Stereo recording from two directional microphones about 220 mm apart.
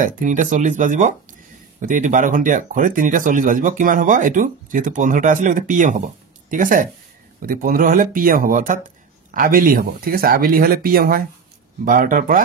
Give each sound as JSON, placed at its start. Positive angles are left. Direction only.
{"t": 0.0, "sound": "speech", "side_deg": -35}